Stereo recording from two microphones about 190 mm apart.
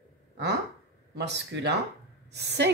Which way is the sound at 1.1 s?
65° right (ahead or behind).